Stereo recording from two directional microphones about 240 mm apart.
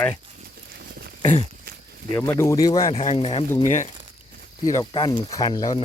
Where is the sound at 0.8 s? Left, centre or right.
Right.